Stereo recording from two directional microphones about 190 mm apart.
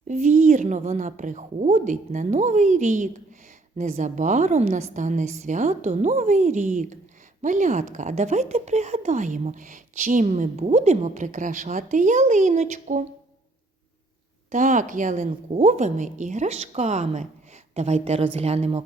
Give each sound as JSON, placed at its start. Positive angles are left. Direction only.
{"t": 0.1, "sound": "a woman's voice", "side_deg": -40}
{"t": 14.5, "sound": "a woman's voice", "side_deg": -40}